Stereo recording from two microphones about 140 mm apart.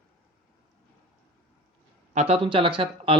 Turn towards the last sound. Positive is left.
turn(degrees=-40)  # may be behind; listen again after turning